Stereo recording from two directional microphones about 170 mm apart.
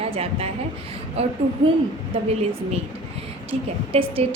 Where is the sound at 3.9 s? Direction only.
35° right (ahead or behind).